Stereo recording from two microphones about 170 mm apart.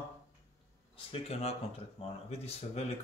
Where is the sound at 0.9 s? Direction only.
35° left (ahead or behind).